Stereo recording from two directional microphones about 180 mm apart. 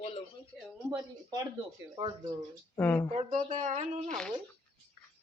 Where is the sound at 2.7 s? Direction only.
10° left (ahead or behind).